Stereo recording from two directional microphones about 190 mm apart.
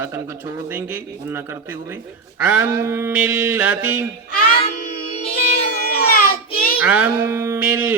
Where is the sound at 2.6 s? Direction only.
15° right (ahead or behind).